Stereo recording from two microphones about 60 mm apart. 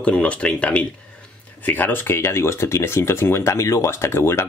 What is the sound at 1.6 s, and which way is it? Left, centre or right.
Speech, left.